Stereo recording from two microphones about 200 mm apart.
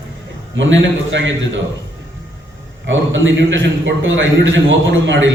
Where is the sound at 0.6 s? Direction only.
70° right (ahead or behind).